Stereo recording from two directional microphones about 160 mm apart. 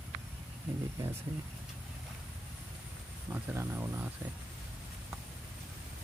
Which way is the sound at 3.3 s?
15° right (ahead or behind).